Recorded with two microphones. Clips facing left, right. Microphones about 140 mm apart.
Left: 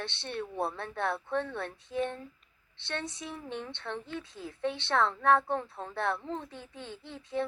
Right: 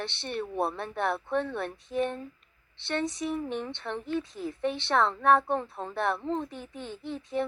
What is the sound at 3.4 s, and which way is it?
A woman's voice, 10° right (ahead or behind).